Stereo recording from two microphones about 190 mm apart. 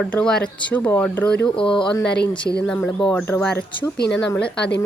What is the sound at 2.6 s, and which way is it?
Speech, 5° left (ahead or behind).